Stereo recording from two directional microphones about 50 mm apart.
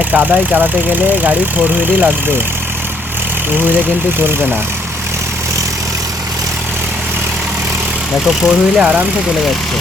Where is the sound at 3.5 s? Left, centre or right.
Right.